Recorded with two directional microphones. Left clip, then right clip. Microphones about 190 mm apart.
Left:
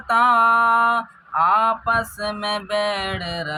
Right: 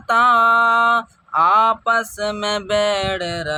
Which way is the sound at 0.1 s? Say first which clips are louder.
Right 2 dB; 40° right (ahead or behind).